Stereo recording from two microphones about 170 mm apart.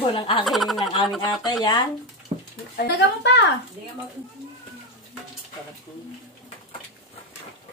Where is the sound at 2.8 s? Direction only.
90° left.